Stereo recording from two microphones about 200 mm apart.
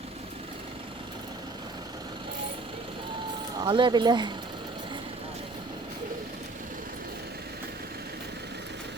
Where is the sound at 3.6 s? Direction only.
25° right (ahead or behind).